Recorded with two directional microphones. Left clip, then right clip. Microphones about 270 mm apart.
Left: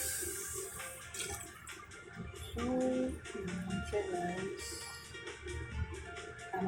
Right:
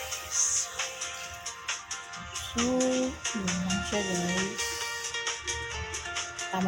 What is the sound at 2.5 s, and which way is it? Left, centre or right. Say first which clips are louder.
Music: right 7 dB; right.